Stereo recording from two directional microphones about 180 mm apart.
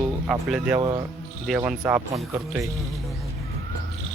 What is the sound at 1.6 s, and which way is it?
Speech, 5° right (ahead or behind).